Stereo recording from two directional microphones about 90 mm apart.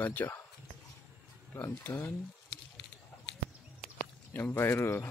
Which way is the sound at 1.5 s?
20° left (ahead or behind).